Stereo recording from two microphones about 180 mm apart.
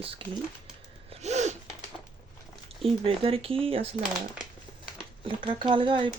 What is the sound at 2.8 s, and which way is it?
Speech, 30° right (ahead or behind).